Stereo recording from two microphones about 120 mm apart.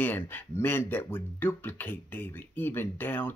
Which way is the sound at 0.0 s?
15° left (ahead or behind).